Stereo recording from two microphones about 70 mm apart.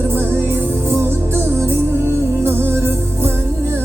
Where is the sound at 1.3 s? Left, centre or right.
Right.